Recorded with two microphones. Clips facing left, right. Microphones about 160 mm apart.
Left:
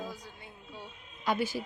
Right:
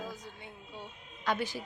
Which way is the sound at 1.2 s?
10° left (ahead or behind).